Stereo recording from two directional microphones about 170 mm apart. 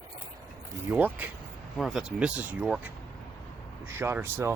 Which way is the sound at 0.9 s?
10° right (ahead or behind).